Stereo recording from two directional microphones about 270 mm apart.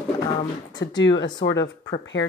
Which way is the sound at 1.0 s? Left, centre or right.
Left.